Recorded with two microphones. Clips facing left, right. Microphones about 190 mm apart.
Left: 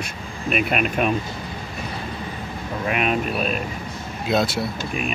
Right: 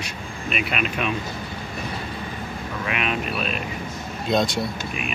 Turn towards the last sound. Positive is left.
turn(degrees=5)  # may be behind; listen again after turning